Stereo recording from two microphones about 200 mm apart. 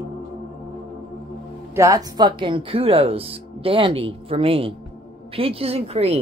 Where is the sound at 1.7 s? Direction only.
15° right (ahead or behind).